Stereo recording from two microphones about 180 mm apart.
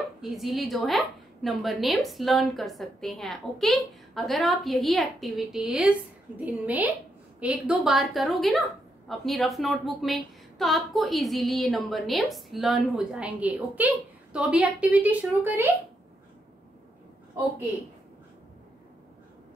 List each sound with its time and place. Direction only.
0.2 s a woman's voice: centre (ahead or behind)